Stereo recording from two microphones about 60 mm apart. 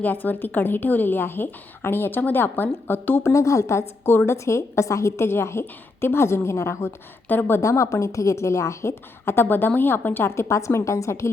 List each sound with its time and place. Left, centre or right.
0.0 s a woman's voice: left
3.3 s a woman's voice: left
7.3 s a woman's voice: left
7.6 s a woman's voice: left